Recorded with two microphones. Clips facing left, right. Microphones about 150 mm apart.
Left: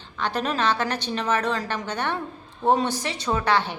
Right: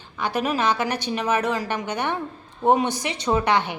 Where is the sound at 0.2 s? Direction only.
10° right (ahead or behind).